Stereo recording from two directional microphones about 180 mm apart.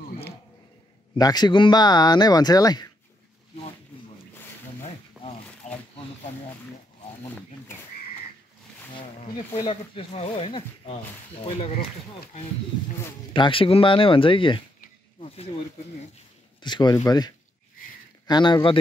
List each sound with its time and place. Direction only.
1.1 s speech: 20° left (ahead or behind)
5.2 s a sound: 5° right (ahead or behind)
5.6 s a sound: 40° left (ahead or behind)
9.7 s speech: 30° left (ahead or behind)
13.3 s speech: 30° left (ahead or behind)
16.6 s speech: 25° left (ahead or behind)